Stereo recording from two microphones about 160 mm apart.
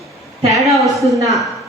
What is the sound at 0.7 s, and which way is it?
Speech, centre (ahead or behind).